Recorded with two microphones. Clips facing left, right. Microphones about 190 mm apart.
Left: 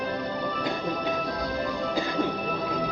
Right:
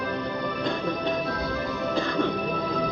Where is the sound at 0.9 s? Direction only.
15° left (ahead or behind).